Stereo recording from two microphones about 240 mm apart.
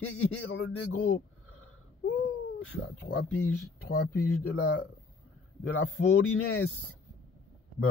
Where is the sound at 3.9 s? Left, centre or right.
Left.